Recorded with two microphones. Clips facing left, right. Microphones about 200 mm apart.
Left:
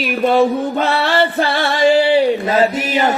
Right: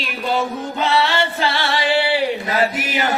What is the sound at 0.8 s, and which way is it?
Music, 55° left (ahead or behind).